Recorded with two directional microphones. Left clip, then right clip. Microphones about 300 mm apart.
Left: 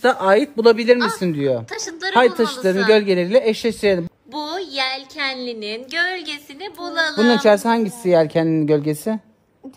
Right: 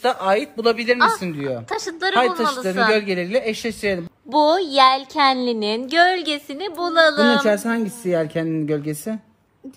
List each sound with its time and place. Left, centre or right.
0.0 s speech: left
0.9 s a woman's voice: centre
1.2 s speech: left
1.7 s a sound: centre
2.1 s speech: left
4.4 s a woman's voice: centre
7.4 s speech: left